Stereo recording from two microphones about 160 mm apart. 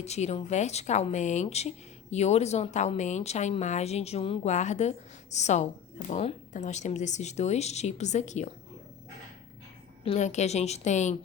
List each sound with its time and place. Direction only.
0.0 s a woman's voice: 45° left (ahead or behind)
10.0 s a woman's voice: 45° left (ahead or behind)